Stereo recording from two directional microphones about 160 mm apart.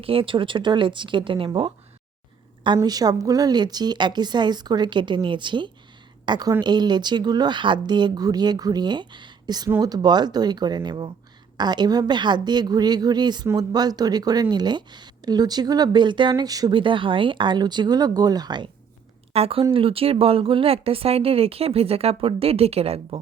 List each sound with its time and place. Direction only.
0.0 s speech: 35° right (ahead or behind)
2.7 s speech: 25° right (ahead or behind)
19.3 s speech: 35° right (ahead or behind)